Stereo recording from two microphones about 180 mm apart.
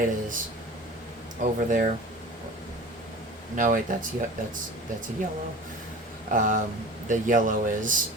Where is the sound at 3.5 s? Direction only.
50° right (ahead or behind).